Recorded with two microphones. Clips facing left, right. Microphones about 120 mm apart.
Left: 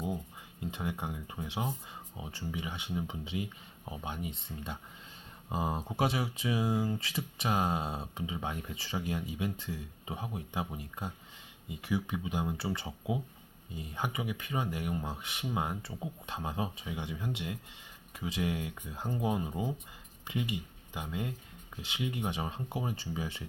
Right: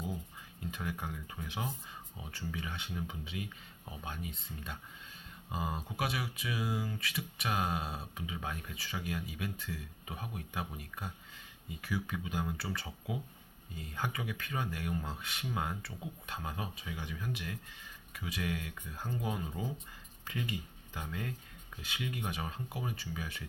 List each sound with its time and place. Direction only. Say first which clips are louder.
0.6 s speech: left 3 dB; 20° left (ahead or behind)